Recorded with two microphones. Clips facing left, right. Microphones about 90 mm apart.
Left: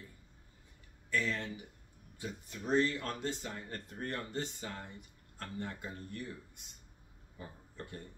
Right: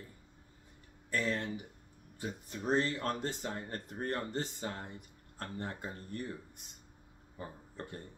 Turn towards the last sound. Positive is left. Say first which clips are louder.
# right 2 dB
turn(degrees=-35)  # may be behind; listen again after turning